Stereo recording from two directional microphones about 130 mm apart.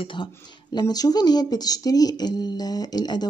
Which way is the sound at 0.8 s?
30° left (ahead or behind).